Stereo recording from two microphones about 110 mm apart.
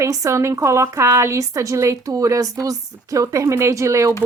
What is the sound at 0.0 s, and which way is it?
Speech, 25° right (ahead or behind).